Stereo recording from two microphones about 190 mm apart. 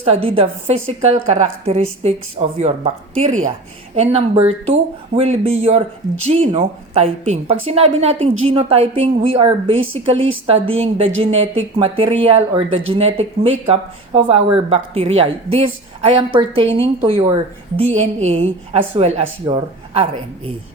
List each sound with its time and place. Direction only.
0.0 s speech: 30° right (ahead or behind)